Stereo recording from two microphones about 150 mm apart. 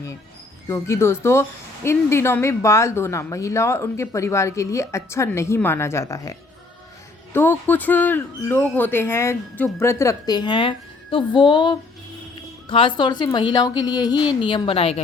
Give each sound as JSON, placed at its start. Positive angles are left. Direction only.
{"t": 0.7, "sound": "speech", "side_deg": 15}
{"t": 7.3, "sound": "a woman's voice", "side_deg": 15}